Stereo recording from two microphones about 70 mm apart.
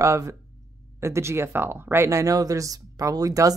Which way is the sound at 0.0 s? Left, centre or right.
Right.